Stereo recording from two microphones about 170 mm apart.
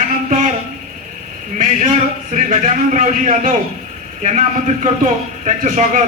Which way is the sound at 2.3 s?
50° right (ahead or behind).